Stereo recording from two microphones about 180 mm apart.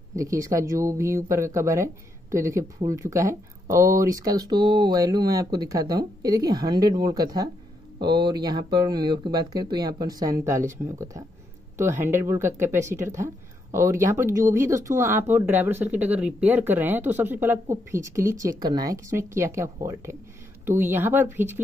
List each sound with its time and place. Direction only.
0.1 s speech: 15° right (ahead or behind)